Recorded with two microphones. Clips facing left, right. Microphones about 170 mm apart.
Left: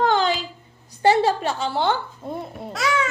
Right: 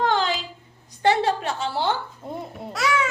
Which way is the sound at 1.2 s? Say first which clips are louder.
Left 2 dB; centre (ahead or behind).